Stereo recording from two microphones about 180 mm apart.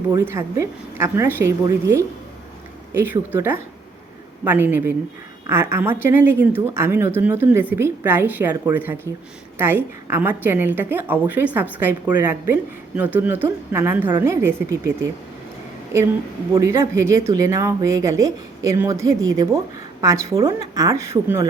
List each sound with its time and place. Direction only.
0.2 s a woman's voice: 15° right (ahead or behind)
16.6 s a woman's voice: 15° right (ahead or behind)